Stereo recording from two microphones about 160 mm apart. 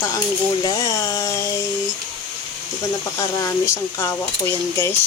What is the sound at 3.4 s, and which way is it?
Speech, 15° left (ahead or behind).